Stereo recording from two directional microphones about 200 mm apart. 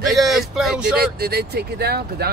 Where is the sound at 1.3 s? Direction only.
50° right (ahead or behind).